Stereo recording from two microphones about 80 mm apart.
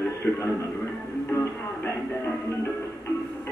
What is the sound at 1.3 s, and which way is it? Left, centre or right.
Music, left.